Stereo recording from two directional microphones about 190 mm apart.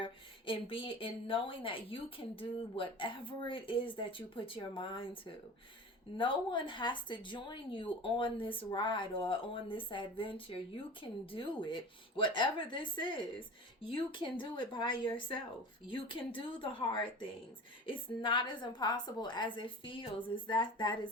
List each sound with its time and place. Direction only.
0.0 s speech: 25° left (ahead or behind)